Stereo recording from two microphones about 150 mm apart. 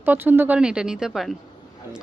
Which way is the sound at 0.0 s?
15° right (ahead or behind).